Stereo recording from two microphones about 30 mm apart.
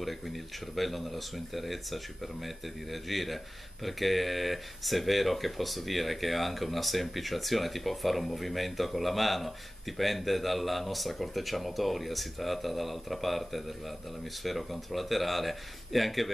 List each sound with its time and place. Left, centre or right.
0.7 s speech: centre